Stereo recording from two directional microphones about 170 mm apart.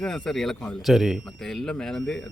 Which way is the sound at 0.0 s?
5° left (ahead or behind).